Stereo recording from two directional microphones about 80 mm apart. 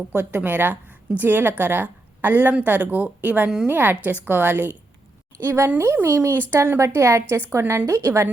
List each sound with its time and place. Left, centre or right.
0.1 s a woman's voice: right